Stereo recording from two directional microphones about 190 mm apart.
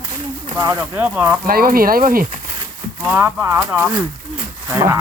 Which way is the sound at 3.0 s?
10° right (ahead or behind).